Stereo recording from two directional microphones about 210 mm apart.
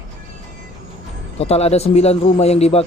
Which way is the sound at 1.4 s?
30° left (ahead or behind).